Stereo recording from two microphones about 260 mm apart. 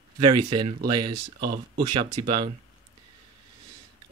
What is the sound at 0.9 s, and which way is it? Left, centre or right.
Speech, right.